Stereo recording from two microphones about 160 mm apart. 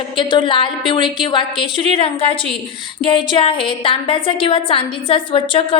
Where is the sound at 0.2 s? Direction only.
30° left (ahead or behind).